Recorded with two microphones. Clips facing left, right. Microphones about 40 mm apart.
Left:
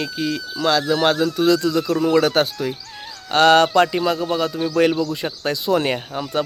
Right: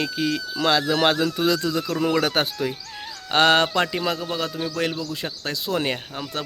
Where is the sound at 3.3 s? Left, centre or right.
Centre.